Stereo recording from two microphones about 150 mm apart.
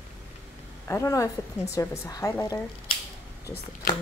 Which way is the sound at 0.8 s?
20° left (ahead or behind).